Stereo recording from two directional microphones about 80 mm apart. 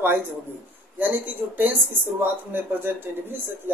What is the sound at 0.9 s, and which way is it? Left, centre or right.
Speech, right.